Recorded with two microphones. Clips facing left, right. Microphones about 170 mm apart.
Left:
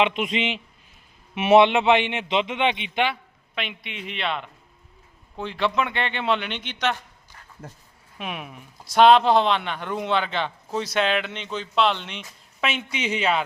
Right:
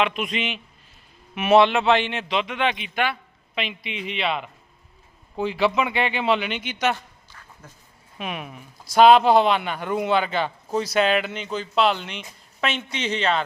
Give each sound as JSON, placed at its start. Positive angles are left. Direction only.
{"t": 0.0, "sound": "a man's voice", "side_deg": 25}
{"t": 3.5, "sound": "speech", "side_deg": 0}
{"t": 8.2, "sound": "a man's voice", "side_deg": 0}